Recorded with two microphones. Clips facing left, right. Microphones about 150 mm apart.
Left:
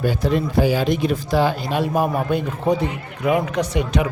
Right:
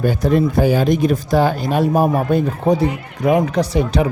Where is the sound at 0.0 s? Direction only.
50° right (ahead or behind).